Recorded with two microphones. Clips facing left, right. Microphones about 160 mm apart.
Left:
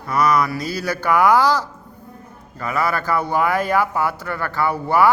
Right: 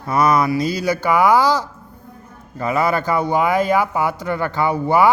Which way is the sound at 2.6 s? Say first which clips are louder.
Right 3 dB; 25° right (ahead or behind).